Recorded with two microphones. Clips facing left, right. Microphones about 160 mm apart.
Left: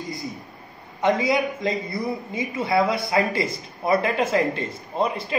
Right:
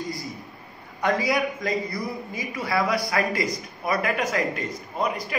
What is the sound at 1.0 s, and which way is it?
A man's voice, 20° left (ahead or behind).